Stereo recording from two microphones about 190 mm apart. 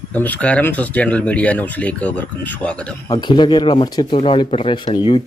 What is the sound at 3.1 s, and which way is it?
Speech, 25° left (ahead or behind).